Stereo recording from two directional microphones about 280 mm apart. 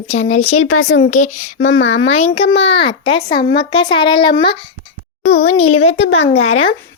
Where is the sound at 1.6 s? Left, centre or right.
Left.